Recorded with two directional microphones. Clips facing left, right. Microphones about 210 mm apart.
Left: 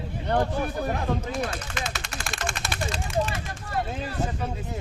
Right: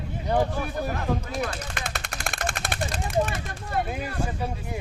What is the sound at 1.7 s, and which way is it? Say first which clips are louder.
Machine gun: left 1 dB; 55° right (ahead or behind).